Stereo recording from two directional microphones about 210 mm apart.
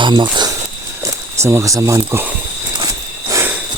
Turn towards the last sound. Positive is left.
turn(degrees=-15)  # may be behind; listen again after turning